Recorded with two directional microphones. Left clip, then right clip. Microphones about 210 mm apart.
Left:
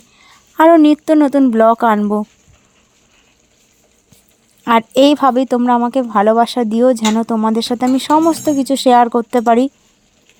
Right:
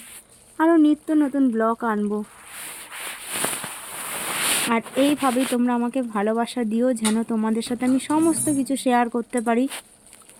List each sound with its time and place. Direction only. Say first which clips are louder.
0.5 s speech: left 10 dB; 45° left (ahead or behind)
4.7 s speech: left 15 dB; 45° left (ahead or behind)